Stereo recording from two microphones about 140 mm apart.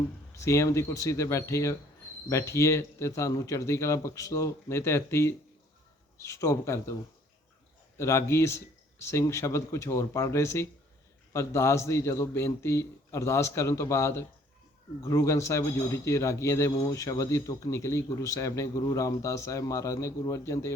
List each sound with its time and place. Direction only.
0.3 s speech: 20° left (ahead or behind)
7.9 s speech: 20° left (ahead or behind)